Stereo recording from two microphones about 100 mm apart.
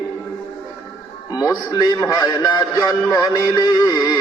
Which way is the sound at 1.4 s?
35° left (ahead or behind).